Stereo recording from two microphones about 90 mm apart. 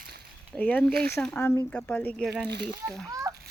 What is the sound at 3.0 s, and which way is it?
Splash, 40° right (ahead or behind).